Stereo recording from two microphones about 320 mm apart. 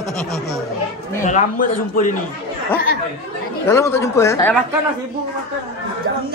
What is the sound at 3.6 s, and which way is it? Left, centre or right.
Speech, centre.